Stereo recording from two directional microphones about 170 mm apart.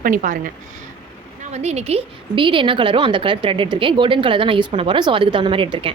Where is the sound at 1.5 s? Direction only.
40° right (ahead or behind).